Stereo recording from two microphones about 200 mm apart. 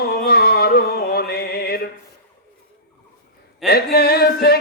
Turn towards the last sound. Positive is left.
turn(degrees=50)  # may be behind; listen again after turning